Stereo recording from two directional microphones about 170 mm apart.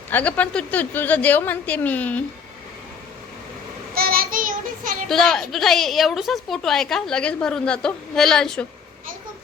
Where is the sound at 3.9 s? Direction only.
60° right (ahead or behind).